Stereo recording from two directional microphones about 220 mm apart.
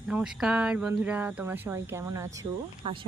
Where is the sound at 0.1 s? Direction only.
5° right (ahead or behind).